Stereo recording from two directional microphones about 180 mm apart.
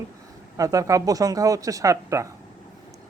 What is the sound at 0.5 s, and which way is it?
A man's voice, 20° right (ahead or behind).